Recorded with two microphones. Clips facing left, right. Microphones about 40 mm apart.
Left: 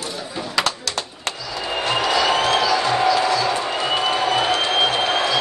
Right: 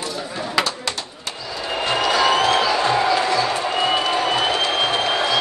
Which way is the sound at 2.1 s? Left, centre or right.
Right.